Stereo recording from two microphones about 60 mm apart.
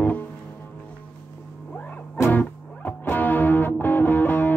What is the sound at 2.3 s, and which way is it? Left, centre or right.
Music, left.